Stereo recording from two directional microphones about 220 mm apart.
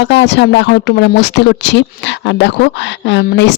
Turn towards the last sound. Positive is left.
turn(degrees=50)  # may be behind; listen again after turning